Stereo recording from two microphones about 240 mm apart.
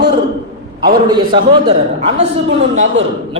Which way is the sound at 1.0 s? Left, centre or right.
Centre.